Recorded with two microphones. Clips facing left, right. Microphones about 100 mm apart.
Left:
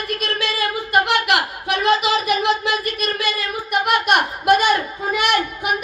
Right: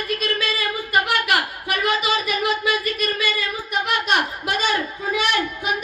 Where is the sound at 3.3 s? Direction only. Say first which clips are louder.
Left 3 dB; 60° left (ahead or behind).